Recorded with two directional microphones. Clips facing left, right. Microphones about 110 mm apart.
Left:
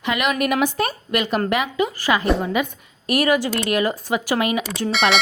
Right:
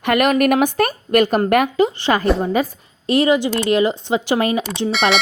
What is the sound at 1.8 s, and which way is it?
Speech, 25° right (ahead or behind).